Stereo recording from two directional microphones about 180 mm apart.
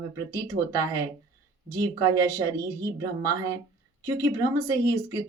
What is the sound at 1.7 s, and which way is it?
A woman's voice, 20° right (ahead or behind).